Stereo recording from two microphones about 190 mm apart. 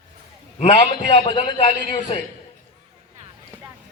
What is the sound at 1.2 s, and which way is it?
Speech, 30° left (ahead or behind).